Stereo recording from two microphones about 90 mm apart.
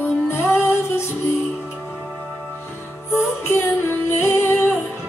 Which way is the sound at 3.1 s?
25° left (ahead or behind).